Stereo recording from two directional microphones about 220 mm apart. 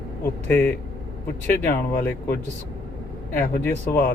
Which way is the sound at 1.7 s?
45° left (ahead or behind).